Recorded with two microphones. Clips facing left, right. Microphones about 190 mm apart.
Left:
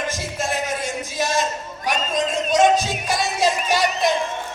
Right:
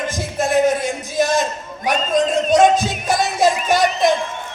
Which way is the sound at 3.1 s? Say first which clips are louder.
Right 5 dB; 50° right (ahead or behind).